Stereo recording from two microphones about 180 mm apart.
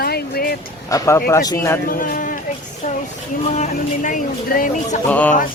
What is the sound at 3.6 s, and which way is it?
Speech, 45° left (ahead or behind).